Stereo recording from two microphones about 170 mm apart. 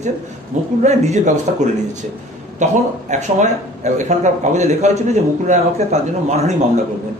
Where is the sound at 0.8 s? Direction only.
45° right (ahead or behind).